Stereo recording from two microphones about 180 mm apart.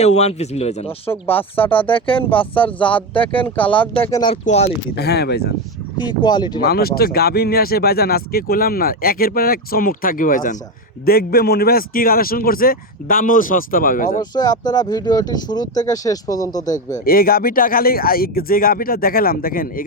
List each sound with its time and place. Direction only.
0.0 s speech: 35° left (ahead or behind)
1.4 s speech: 10° left (ahead or behind)
1.7 s speech: 30° left (ahead or behind)
2.6 s speech: 5° left (ahead or behind)
2.9 s speech: 30° left (ahead or behind)
4.4 s speech: 40° left (ahead or behind)
4.9 s speech: 65° left (ahead or behind)
6.0 s speech: 25° left (ahead or behind)
6.6 s speech: 60° left (ahead or behind)
14.2 s speech: 20° left (ahead or behind)
16.7 s speech: 50° left (ahead or behind)